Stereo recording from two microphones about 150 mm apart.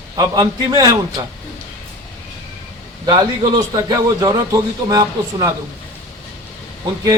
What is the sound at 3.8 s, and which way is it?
A man's voice, 25° right (ahead or behind).